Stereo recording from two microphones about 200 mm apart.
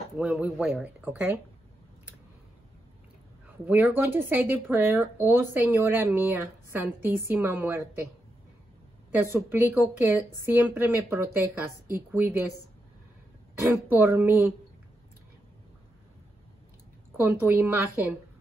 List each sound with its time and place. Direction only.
0.2 s a woman's voice: 5° right (ahead or behind)
3.4 s a woman's voice: 10° right (ahead or behind)
9.1 s a woman's voice: 10° right (ahead or behind)
13.6 s a woman's voice: 10° right (ahead or behind)
17.2 s a woman's voice: 10° right (ahead or behind)